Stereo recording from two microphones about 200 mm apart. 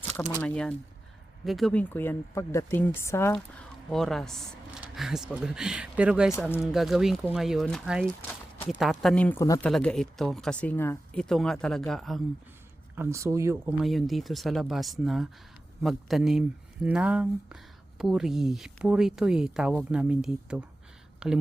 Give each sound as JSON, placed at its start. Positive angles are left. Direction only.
{"t": 0.3, "sound": "speech", "side_deg": 5}
{"t": 3.9, "sound": "speech", "side_deg": 0}
{"t": 9.6, "sound": "speech", "side_deg": 0}
{"t": 13.0, "sound": "speech", "side_deg": -15}
{"t": 13.8, "sound": "speech", "side_deg": 0}